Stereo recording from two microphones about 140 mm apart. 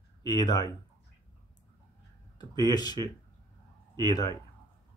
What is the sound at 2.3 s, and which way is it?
Mantra, 30° left (ahead or behind).